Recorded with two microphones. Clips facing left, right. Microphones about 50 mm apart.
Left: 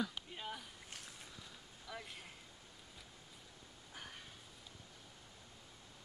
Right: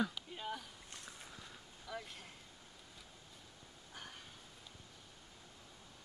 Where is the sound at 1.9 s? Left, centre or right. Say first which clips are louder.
Right 2 dB; centre.